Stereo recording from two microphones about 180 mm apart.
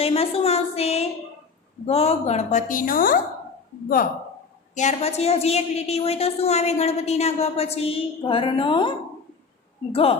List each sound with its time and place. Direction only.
0.0 s a woman's voice: 35° left (ahead or behind); by 3.2 s 50° left (ahead or behind)
4.7 s a woman's voice: 40° left (ahead or behind)
9.9 s a woman's voice: 30° left (ahead or behind)